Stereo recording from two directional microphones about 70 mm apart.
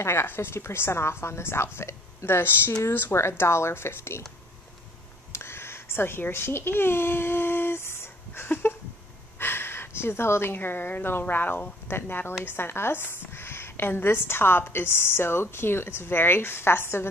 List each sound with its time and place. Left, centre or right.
0.0 s a woman's voice: left
5.3 s babbling: left
9.4 s a woman's voice: left